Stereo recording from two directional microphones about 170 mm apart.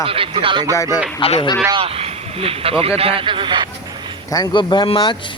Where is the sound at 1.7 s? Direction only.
35° right (ahead or behind).